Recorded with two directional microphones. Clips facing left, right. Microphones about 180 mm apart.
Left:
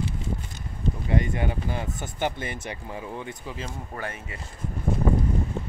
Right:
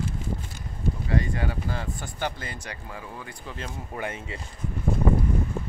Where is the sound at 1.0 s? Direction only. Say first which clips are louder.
Left 2 dB; 20° left (ahead or behind).